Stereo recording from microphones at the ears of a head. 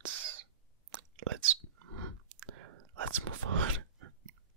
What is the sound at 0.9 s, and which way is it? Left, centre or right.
Whispering, right.